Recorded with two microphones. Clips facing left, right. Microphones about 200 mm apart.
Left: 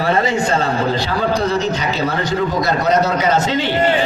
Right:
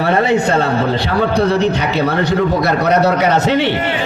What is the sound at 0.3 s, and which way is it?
A man's voice, 60° right (ahead or behind).